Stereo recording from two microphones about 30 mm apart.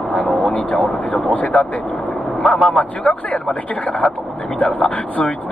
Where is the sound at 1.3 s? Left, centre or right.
Left.